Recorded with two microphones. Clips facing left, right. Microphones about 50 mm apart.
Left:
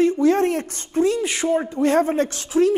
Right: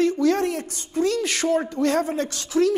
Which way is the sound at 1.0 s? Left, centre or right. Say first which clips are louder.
Left 2 dB; centre.